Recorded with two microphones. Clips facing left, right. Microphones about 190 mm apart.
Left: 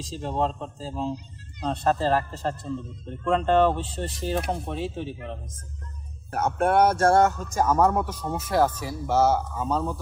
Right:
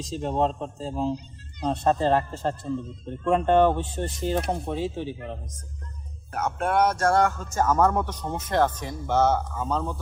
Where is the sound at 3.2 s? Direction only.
15° right (ahead or behind).